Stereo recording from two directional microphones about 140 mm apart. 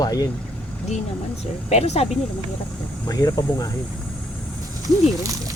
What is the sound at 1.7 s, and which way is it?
Speech, 50° left (ahead or behind).